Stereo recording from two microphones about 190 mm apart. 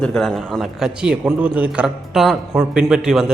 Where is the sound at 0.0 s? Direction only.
5° left (ahead or behind).